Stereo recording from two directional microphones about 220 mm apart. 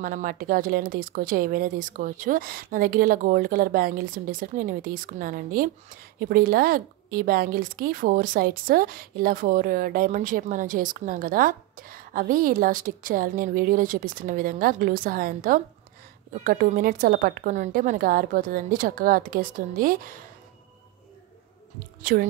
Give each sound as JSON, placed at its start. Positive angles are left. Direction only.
{"t": 0.0, "sound": "a woman's voice", "side_deg": -40}
{"t": 22.0, "sound": "a woman's voice", "side_deg": -40}